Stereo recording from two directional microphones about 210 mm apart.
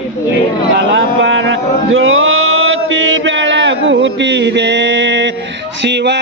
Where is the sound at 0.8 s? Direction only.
60° right (ahead or behind).